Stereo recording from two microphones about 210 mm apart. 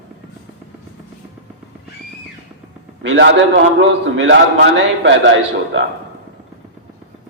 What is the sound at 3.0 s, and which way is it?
A man's voice, 60° right (ahead or behind).